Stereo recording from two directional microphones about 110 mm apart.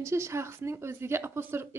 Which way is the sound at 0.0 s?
25° right (ahead or behind).